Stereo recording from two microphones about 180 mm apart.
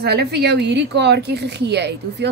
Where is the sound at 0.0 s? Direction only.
65° right (ahead or behind).